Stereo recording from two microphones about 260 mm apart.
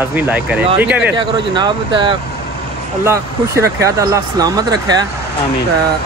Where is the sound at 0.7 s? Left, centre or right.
Centre.